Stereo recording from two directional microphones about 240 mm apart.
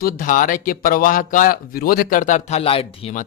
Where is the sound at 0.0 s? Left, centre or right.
Left.